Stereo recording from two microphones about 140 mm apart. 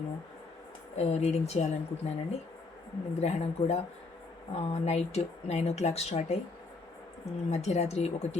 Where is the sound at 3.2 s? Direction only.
50° left (ahead or behind).